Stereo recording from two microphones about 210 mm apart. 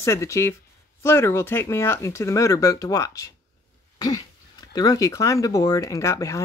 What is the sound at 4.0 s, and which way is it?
Throat clearing, 15° left (ahead or behind).